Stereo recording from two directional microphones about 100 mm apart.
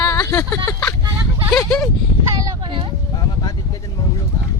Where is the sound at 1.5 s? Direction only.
5° left (ahead or behind).